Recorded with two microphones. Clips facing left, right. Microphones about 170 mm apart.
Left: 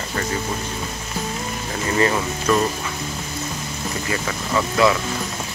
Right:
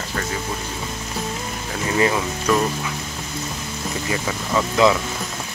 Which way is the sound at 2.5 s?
10° right (ahead or behind).